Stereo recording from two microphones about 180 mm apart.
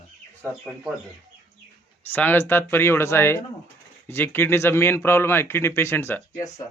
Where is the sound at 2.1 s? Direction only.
10° left (ahead or behind).